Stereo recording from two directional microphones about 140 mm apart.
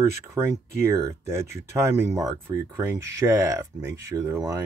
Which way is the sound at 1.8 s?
25° right (ahead or behind).